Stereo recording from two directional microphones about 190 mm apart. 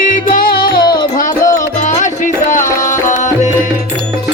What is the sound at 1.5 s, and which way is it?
Music, 40° left (ahead or behind).